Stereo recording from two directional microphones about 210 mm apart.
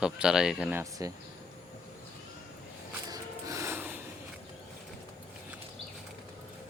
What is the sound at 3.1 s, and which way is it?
Snort, 15° right (ahead or behind).